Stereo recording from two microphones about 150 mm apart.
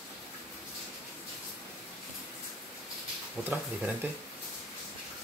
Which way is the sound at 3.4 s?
10° right (ahead or behind).